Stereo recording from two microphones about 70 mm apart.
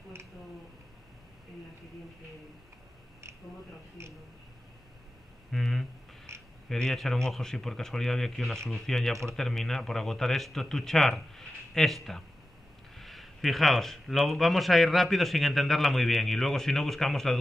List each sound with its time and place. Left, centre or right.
4.0 s speech: right
5.5 s a sound: centre
6.3 s frog: right
6.7 s speech: centre